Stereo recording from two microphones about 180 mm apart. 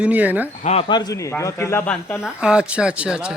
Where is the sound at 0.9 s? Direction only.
20° left (ahead or behind).